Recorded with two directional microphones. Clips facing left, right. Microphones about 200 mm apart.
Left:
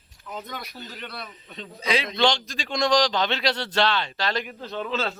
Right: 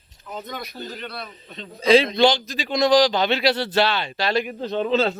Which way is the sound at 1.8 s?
30° right (ahead or behind).